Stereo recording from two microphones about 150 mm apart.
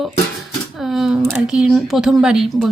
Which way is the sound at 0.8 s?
Centre (ahead or behind).